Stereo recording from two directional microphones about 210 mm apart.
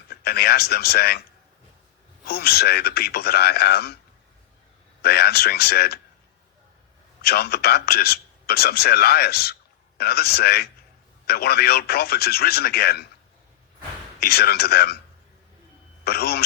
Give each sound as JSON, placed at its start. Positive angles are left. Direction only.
{"t": 0.1, "sound": "speech", "side_deg": 50}
{"t": 2.2, "sound": "a man's voice", "side_deg": 45}
{"t": 5.0, "sound": "a man's voice", "side_deg": 50}
{"t": 7.2, "sound": "a man's voice", "side_deg": 50}
{"t": 14.2, "sound": "a man's voice", "side_deg": 50}
{"t": 16.0, "sound": "a man's voice", "side_deg": 50}